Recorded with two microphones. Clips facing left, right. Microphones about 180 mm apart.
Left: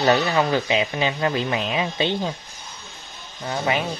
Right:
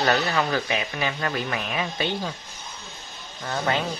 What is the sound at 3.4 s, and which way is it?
Speech, 15° left (ahead or behind).